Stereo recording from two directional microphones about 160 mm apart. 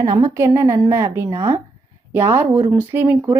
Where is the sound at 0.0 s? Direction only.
20° right (ahead or behind).